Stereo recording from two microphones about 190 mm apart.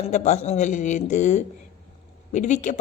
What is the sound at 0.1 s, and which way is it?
A woman's voice, 35° left (ahead or behind).